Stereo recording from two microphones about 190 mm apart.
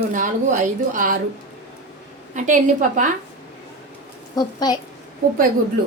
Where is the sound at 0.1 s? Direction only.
40° right (ahead or behind).